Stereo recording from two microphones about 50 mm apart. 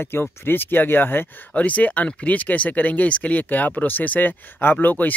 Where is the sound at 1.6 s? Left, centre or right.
Left.